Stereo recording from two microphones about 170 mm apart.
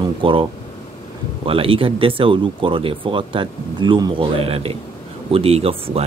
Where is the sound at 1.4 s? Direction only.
35° right (ahead or behind).